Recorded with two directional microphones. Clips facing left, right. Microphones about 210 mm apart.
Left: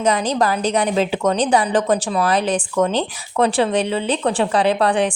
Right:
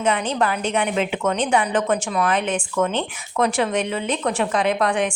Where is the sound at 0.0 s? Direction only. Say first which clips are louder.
Left 3 dB; 35° left (ahead or behind).